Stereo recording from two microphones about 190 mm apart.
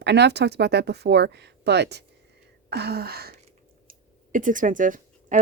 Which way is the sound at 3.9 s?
45° right (ahead or behind).